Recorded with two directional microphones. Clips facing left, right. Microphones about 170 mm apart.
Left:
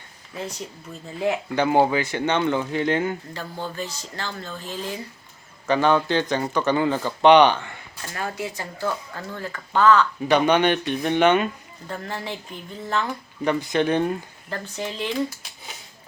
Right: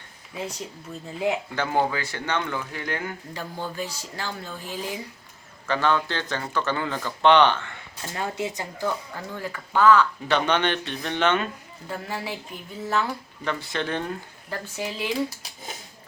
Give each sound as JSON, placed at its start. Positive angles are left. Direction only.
{"t": 1.5, "sound": "speech", "side_deg": 20}
{"t": 3.3, "sound": "speech", "side_deg": -10}
{"t": 5.6, "sound": "speech", "side_deg": 15}
{"t": 8.0, "sound": "speech", "side_deg": -20}
{"t": 10.2, "sound": "speech", "side_deg": 15}
{"t": 11.9, "sound": "speech", "side_deg": -5}
{"t": 13.4, "sound": "speech", "side_deg": 15}
{"t": 14.5, "sound": "speech", "side_deg": -5}